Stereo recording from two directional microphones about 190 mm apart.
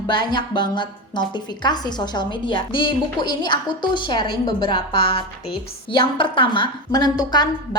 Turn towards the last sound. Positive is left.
turn(degrees=20)  # may be behind; listen again after turning